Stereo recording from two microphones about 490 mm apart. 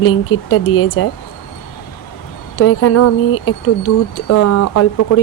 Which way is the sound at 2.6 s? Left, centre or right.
Left.